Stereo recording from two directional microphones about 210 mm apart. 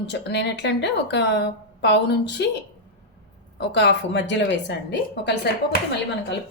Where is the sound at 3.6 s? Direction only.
55° left (ahead or behind).